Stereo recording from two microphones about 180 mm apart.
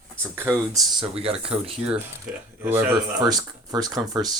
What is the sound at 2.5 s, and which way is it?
A man's voice, 15° right (ahead or behind).